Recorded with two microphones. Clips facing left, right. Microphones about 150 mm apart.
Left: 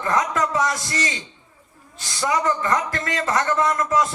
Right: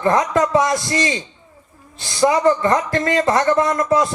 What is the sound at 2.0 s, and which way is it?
Speech, 30° right (ahead or behind).